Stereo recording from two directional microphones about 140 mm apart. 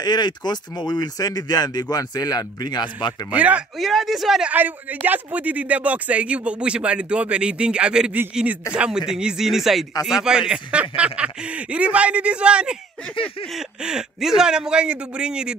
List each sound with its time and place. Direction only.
0.0 s speech: 30° left (ahead or behind)
3.3 s a man's voice: 10° right (ahead or behind)
13.1 s a sound: 40° left (ahead or behind)
13.5 s a man's voice: 5° right (ahead or behind)